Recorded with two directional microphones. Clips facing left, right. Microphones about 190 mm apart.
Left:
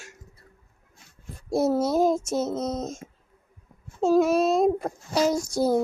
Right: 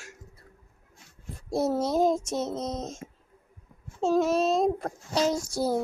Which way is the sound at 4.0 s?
10° left (ahead or behind).